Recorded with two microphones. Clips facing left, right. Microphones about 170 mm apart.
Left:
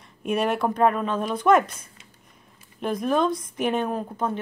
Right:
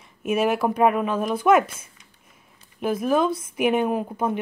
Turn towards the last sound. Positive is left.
turn(degrees=-10)  # may be behind; listen again after turning